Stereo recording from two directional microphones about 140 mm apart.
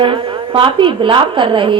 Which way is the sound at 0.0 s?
40° right (ahead or behind).